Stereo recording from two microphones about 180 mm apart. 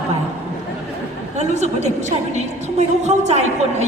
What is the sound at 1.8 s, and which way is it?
A woman's voice, 40° right (ahead or behind).